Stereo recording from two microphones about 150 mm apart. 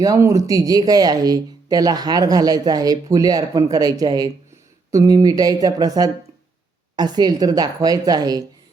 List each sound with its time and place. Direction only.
0.0 s speech: 20° right (ahead or behind)